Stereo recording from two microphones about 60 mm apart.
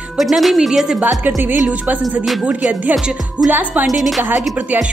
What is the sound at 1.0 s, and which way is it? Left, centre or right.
Music, right.